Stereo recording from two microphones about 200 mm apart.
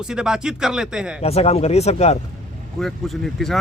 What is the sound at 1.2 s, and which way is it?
Speech, 30° left (ahead or behind).